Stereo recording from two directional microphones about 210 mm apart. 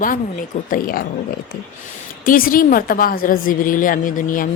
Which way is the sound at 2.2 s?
40° left (ahead or behind).